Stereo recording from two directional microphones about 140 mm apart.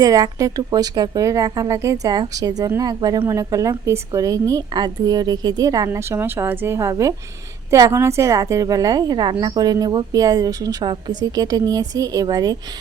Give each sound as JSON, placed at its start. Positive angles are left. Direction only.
{"t": 0.0, "sound": "a woman's voice", "side_deg": -25}